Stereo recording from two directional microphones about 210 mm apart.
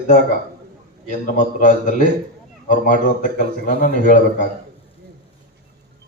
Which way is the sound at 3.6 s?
40° left (ahead or behind).